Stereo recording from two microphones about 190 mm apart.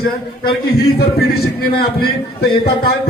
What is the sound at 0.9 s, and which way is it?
Speech, 55° left (ahead or behind).